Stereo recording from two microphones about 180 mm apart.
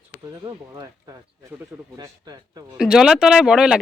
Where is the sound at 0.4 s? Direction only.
20° right (ahead or behind).